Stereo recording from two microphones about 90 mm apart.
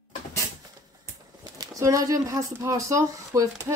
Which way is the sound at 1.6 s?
35° right (ahead or behind).